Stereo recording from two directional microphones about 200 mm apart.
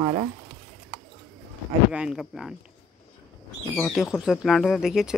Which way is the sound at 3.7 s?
Centre (ahead or behind).